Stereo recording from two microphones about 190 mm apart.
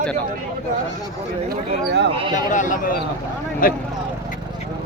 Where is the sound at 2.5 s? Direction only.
40° left (ahead or behind).